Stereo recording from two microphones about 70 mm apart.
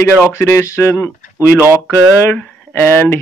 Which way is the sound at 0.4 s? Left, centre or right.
Left.